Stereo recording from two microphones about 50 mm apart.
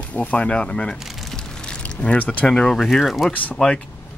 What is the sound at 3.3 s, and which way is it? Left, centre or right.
Speech, left.